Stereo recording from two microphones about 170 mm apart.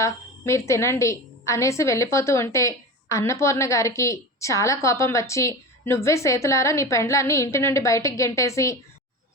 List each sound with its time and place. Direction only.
0.0 s a woman's voice: 15° left (ahead or behind)